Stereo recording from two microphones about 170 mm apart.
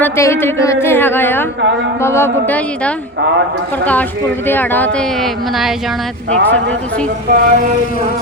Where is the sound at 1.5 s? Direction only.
90° right.